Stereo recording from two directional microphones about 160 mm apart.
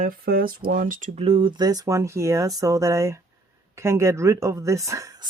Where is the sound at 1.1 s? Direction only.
35° right (ahead or behind).